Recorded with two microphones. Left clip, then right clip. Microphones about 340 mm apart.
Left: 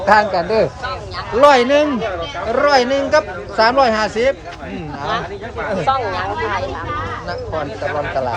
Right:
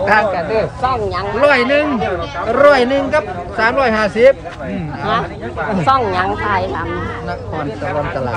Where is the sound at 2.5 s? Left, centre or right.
Centre.